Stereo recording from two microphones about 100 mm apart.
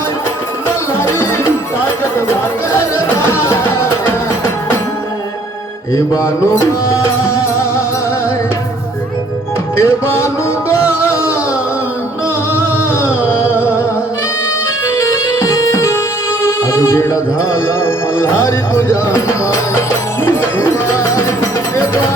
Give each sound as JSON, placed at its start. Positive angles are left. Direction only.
{"t": 3.3, "sound": "music", "side_deg": 25}
{"t": 5.9, "sound": "music", "side_deg": 30}
{"t": 9.7, "sound": "music", "side_deg": 25}
{"t": 14.9, "sound": "music", "side_deg": 30}